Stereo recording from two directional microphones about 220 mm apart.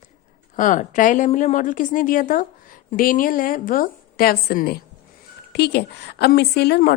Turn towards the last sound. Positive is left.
turn(degrees=45)  # may be behind; listen again after turning